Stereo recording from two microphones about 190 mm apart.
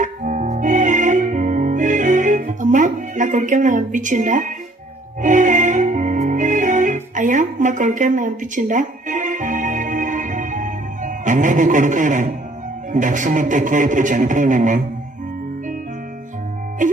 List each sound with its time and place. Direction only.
0.0 s music: 40° right (ahead or behind)
12.9 s a man's voice: 40° right (ahead or behind)